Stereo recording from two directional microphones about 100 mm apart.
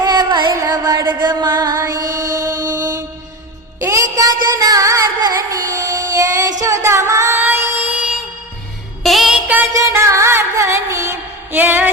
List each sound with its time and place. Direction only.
0.0 s carnatic music: 45° right (ahead or behind)
1.2 s music: 45° right (ahead or behind)
1.9 s mantra: 40° right (ahead or behind)
3.8 s music: 30° right (ahead or behind); by 9.4 s 5° right (ahead or behind)
9.7 s music: 30° right (ahead or behind)
11.5 s a sound: 15° right (ahead or behind)